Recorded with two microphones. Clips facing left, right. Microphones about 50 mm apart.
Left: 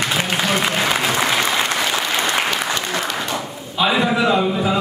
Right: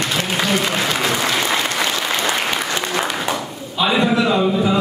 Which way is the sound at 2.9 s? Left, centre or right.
Centre.